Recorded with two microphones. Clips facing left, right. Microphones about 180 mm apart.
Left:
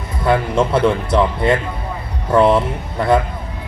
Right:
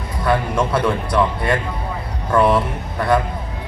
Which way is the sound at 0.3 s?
25° left (ahead or behind).